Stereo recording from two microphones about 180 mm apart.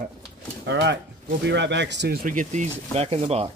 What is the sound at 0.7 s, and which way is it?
Speech, 80° right.